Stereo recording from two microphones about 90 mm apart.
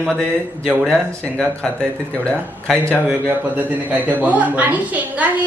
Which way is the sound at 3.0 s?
20° right (ahead or behind).